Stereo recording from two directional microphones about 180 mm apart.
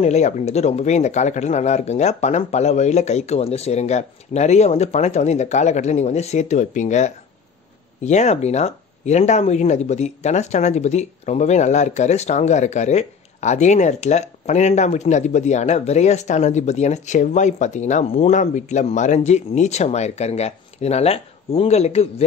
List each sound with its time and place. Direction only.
0.0 s speech: 40° left (ahead or behind)